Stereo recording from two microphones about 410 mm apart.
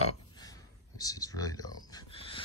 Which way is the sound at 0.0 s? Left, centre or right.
Centre.